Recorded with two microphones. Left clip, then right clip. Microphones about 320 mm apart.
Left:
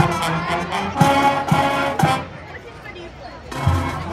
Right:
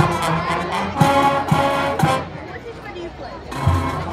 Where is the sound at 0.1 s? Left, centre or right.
Centre.